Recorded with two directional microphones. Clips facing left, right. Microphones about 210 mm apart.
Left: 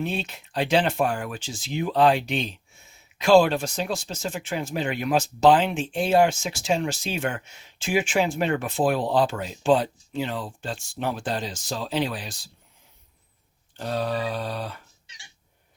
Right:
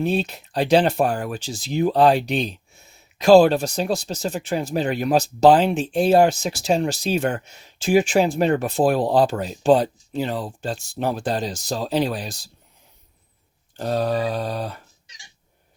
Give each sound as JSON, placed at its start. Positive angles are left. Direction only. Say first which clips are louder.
{"t": 0.0, "sound": "speech", "louder": "right 7 dB", "side_deg": -40}
{"t": 13.7, "sound": "speech", "louder": "right 5 dB", "side_deg": -40}